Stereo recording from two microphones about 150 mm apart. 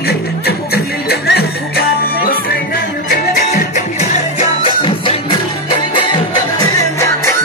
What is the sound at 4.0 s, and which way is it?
Music, 50° left (ahead or behind).